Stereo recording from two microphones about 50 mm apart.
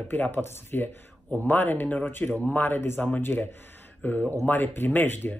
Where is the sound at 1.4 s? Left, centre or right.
Left.